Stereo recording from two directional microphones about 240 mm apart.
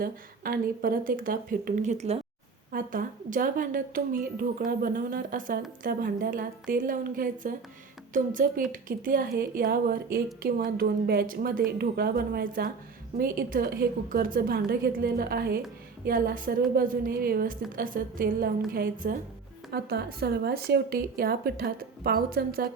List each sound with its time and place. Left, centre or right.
0.0 s speech: right